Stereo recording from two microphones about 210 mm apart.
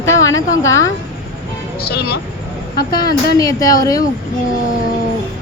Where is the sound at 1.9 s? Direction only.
50° left (ahead or behind).